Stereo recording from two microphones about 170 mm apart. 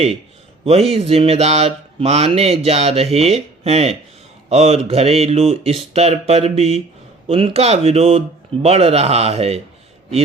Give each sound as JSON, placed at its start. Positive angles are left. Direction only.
{"t": 0.6, "sound": "speech", "side_deg": -40}